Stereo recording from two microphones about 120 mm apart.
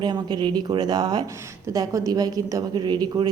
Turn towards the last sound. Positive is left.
turn(degrees=-35)  # may be behind; listen again after turning